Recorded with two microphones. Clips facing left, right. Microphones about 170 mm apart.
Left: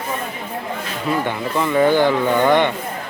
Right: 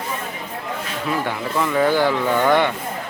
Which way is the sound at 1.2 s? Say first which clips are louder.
Left 2 dB; centre (ahead or behind).